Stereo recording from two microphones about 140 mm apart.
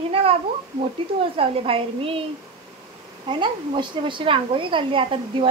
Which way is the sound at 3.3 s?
35° right (ahead or behind).